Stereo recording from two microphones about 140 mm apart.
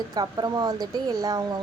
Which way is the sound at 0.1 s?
30° right (ahead or behind).